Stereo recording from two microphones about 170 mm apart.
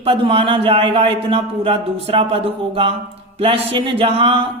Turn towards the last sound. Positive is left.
turn(degrees=-30)  # may be behind; listen again after turning